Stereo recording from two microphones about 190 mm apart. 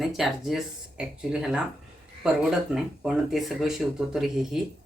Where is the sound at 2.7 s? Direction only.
5° right (ahead or behind).